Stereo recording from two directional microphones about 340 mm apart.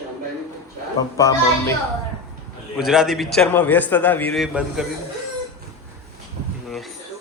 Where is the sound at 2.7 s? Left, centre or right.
Centre.